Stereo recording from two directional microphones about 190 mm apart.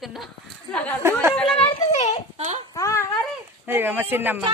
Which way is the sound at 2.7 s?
15° left (ahead or behind).